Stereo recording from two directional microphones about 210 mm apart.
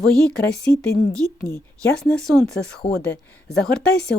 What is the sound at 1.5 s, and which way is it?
Speech, 5° left (ahead or behind).